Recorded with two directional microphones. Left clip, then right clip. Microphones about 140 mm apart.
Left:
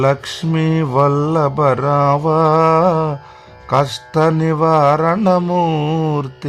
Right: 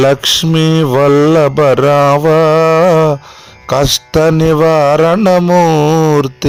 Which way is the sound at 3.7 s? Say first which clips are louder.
Right 5 dB; 45° right (ahead or behind).